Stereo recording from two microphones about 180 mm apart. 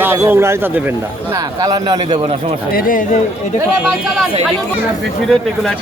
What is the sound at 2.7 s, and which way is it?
Speech, 50° left (ahead or behind).